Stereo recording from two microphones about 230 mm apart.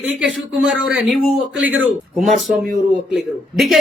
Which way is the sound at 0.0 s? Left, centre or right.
Centre.